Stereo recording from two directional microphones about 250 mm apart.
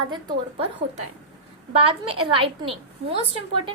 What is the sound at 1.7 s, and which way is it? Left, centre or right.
A woman's voice, right.